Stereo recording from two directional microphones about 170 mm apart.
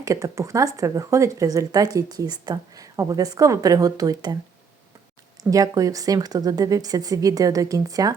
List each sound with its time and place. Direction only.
0.0 s speech: 20° right (ahead or behind)
5.4 s speech: 20° right (ahead or behind)